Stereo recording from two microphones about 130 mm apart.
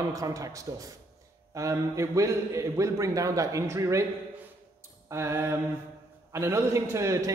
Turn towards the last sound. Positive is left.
turn(degrees=-25)  # may be behind; listen again after turning